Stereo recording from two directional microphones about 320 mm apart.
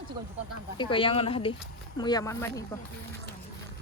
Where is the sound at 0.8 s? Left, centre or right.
Centre.